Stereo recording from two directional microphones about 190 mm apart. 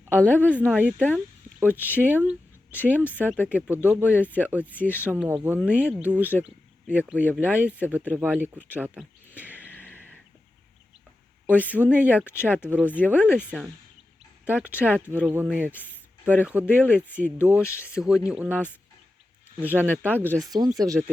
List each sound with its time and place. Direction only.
0.3 s speech: 10° right (ahead or behind)
1.9 s speech: 10° left (ahead or behind)
2.1 s mouse: 10° right (ahead or behind)
2.8 s speech: 5° right (ahead or behind)
8.6 s a sound: 10° right (ahead or behind)
9.9 s a sound: 10° left (ahead or behind)
11.4 s speech: 10° right (ahead or behind)
14.4 s speech: 10° right (ahead or behind)
16.9 s speech: 10° left (ahead or behind)
17.3 s speech: 10° right (ahead or behind)
17.7 s speech: 15° left (ahead or behind)
18.3 s speech: 5° right (ahead or behind)
20.0 s speech: 10° right (ahead or behind)